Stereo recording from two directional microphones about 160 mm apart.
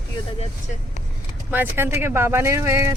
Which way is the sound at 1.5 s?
10° right (ahead or behind).